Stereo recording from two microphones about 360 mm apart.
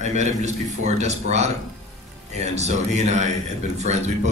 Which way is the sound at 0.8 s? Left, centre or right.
Centre.